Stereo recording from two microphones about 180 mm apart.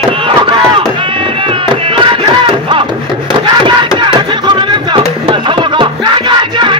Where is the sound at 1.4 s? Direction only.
30° right (ahead or behind).